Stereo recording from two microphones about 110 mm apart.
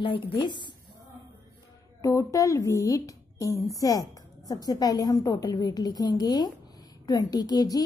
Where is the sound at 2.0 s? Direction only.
30° left (ahead or behind).